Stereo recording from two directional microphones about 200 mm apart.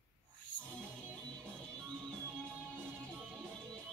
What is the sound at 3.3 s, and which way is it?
Music, 5° left (ahead or behind).